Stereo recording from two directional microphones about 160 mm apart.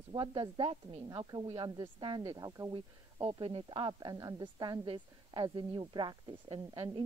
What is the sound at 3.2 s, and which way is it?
A woman's voice, 35° right (ahead or behind).